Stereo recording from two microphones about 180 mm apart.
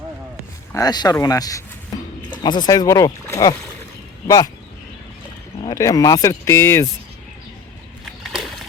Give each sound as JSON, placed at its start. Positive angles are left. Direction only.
{"t": 0.7, "sound": "speech", "side_deg": 20}
{"t": 5.6, "sound": "speech", "side_deg": 20}
{"t": 8.2, "sound": "a sound", "side_deg": 0}